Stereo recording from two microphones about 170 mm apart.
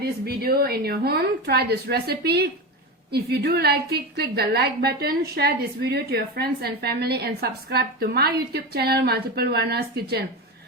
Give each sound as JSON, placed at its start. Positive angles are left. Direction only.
{"t": 0.0, "sound": "a woman's voice", "side_deg": -65}